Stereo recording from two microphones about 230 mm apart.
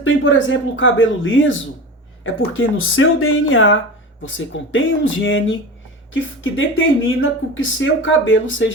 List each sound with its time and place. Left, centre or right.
0.0 s speech: left